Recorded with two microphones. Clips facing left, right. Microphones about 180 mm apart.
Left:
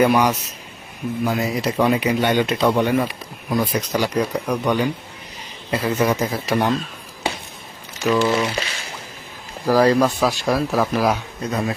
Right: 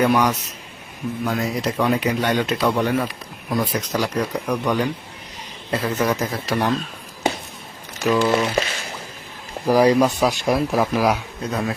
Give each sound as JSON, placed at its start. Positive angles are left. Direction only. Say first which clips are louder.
{"t": 0.0, "sound": "speech", "louder": "left 2 dB", "side_deg": 10}
{"t": 8.3, "sound": "speech", "louder": "right 1 dB", "side_deg": -45}
{"t": 9.6, "sound": "speech", "louder": "even", "side_deg": -15}
{"t": 11.0, "sound": "speech", "louder": "even", "side_deg": 0}